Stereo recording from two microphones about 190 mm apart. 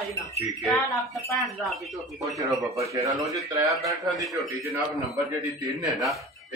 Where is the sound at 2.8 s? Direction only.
15° right (ahead or behind).